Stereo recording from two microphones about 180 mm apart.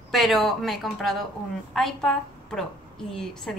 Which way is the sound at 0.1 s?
Centre (ahead or behind).